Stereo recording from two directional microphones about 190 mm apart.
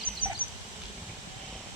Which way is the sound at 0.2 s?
45° left (ahead or behind).